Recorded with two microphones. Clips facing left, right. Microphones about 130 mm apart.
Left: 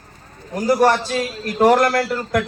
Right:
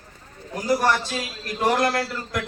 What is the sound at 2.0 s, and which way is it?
Speech, 65° left (ahead or behind).